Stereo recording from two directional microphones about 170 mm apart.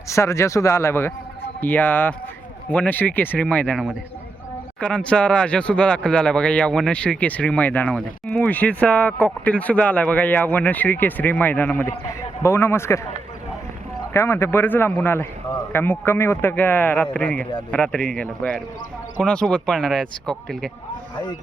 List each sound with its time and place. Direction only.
0.1 s speech: 15° left (ahead or behind)
4.8 s speech: 5° left (ahead or behind)
14.1 s speech: 15° left (ahead or behind)